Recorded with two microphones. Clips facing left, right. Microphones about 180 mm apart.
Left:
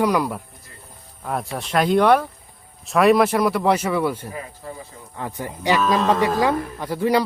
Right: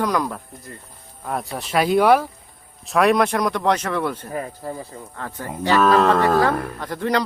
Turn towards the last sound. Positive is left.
turn(degrees=10)  # may be behind; listen again after turning